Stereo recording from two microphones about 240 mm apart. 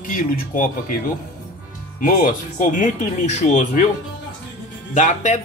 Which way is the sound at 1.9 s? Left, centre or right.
Left.